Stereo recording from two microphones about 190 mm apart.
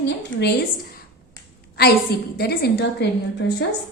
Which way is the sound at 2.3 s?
55° left (ahead or behind).